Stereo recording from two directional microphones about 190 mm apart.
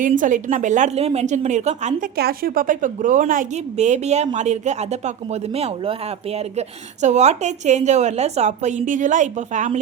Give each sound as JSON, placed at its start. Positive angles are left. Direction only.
{"t": 0.0, "sound": "speech", "side_deg": -40}
{"t": 2.1, "sound": "a woman's voice", "side_deg": -55}